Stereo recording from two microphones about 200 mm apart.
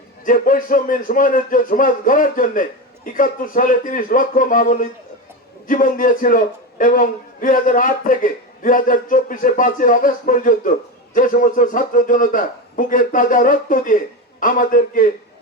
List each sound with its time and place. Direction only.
0.3 s a man's voice: 45° left (ahead or behind)